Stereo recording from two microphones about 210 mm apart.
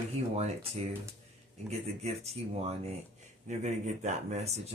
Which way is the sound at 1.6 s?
30° right (ahead or behind).